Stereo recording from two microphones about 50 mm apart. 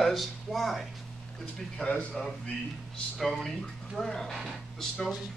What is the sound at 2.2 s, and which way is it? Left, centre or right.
Speech, centre.